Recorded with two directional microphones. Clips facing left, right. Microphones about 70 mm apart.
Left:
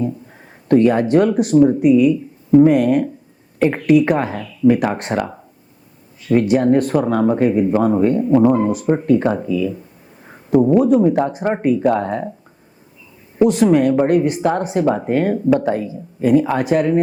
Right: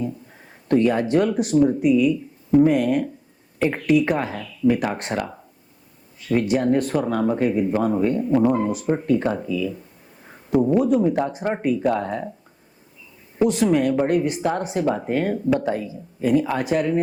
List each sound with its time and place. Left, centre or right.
0.0 s speech: left
6.4 s speech: left
10.5 s speech: left
13.4 s speech: left